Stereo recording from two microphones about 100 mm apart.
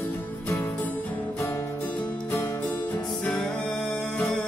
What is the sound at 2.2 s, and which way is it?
Music, 25° left (ahead or behind).